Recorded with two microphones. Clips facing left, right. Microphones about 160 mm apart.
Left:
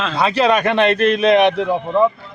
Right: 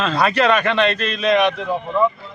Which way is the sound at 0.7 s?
50° left (ahead or behind).